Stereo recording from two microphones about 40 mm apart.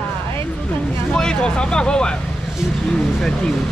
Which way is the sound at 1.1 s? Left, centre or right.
Left.